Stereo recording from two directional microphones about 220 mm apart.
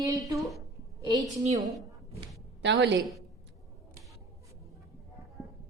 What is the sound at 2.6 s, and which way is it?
Speech, 55° right (ahead or behind).